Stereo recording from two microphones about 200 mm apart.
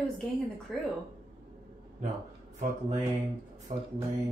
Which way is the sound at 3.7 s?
30° right (ahead or behind).